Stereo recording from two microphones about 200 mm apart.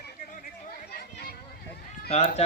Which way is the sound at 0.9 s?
50° left (ahead or behind).